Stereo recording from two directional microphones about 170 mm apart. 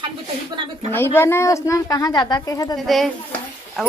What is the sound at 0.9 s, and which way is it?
Speech, 15° left (ahead or behind).